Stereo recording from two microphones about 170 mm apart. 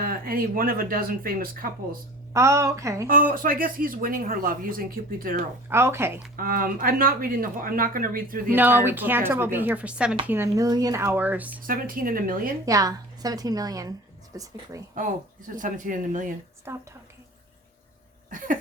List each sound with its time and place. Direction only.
0.0 s speech: 60° right (ahead or behind)
2.3 s speech: 15° right (ahead or behind)
3.1 s speech: 55° right (ahead or behind)
5.6 s speech: 15° right (ahead or behind)
6.3 s speech: 55° right (ahead or behind)
8.4 s speech: 10° right (ahead or behind)
11.6 s speech: 55° right (ahead or behind)
12.6 s a woman's voice: 20° right (ahead or behind)
14.9 s speech: 50° right (ahead or behind)
16.7 s speech: 15° right (ahead or behind)
18.3 s a sound: 50° right (ahead or behind)